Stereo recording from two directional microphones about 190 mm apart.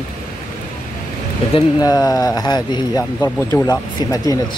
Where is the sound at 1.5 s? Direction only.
20° left (ahead or behind).